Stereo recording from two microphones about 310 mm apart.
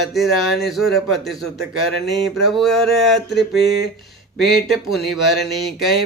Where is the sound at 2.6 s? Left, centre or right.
Centre.